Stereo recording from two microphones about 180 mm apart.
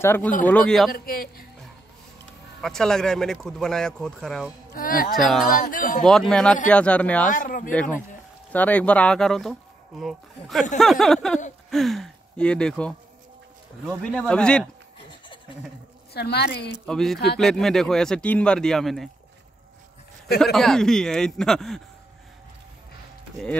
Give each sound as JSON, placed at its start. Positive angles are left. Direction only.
{"t": 0.0, "sound": "speech", "side_deg": 10}
{"t": 0.9, "sound": "a woman's voice", "side_deg": 55}
{"t": 2.6, "sound": "speech", "side_deg": 5}
{"t": 4.7, "sound": "speech", "side_deg": 50}
{"t": 5.1, "sound": "speech", "side_deg": 0}
{"t": 5.5, "sound": "speech", "side_deg": 50}
{"t": 6.0, "sound": "speech", "side_deg": 0}
{"t": 7.2, "sound": "speech", "side_deg": 50}
{"t": 8.5, "sound": "speech", "side_deg": 10}
{"t": 15.0, "sound": "a sound", "side_deg": 25}
{"t": 16.1, "sound": "a woman's voice", "side_deg": 65}
{"t": 16.8, "sound": "speech", "side_deg": 0}
{"t": 20.5, "sound": "speech", "side_deg": 0}